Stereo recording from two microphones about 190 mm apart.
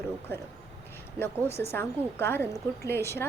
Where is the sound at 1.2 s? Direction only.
10° left (ahead or behind).